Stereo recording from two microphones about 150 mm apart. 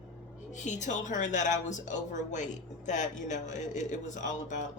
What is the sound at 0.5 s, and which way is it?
A woman's voice, 55° left (ahead or behind).